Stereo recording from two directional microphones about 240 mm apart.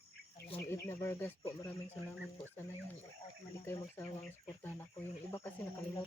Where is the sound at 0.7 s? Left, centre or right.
Centre.